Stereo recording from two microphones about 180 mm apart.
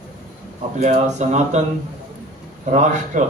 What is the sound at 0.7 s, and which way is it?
Speech, 40° right (ahead or behind).